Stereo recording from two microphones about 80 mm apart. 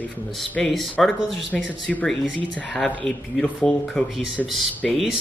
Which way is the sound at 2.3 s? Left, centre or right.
Centre.